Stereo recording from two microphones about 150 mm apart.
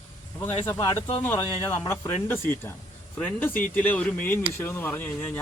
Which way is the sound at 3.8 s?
10° left (ahead or behind).